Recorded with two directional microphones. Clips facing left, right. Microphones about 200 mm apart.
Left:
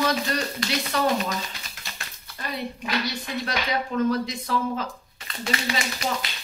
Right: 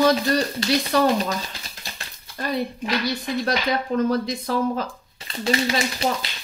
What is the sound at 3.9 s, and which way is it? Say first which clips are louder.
A woman's voice: right 2 dB; 40° right (ahead or behind).